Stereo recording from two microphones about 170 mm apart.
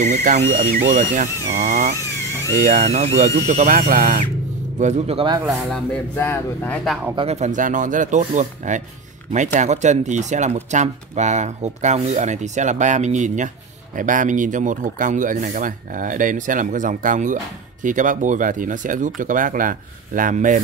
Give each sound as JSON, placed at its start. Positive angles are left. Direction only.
{"t": 0.0, "sound": "speech", "side_deg": -45}
{"t": 0.7, "sound": "speech", "side_deg": -60}
{"t": 2.6, "sound": "speech", "side_deg": -40}
{"t": 5.4, "sound": "speech", "side_deg": 0}
{"t": 6.1, "sound": "speech", "side_deg": 15}
{"t": 7.2, "sound": "speech", "side_deg": -40}